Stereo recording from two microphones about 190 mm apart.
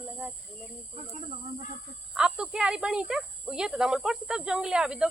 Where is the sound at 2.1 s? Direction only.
5° right (ahead or behind).